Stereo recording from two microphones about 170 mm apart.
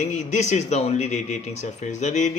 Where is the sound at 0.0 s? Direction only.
40° left (ahead or behind).